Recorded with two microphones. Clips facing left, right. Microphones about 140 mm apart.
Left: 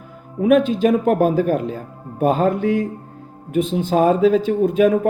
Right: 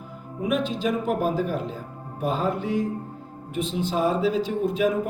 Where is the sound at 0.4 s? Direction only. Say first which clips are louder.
Left 10 dB; 55° left (ahead or behind).